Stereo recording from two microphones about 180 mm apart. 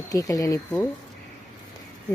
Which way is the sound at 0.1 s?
20° left (ahead or behind).